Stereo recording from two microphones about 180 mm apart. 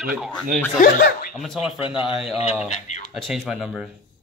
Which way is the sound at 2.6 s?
40° left (ahead or behind).